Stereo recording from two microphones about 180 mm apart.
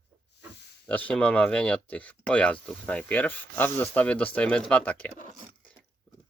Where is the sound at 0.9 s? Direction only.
10° left (ahead or behind).